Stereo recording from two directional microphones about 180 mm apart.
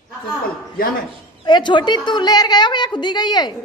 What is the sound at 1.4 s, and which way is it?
A woman's voice, 25° left (ahead or behind).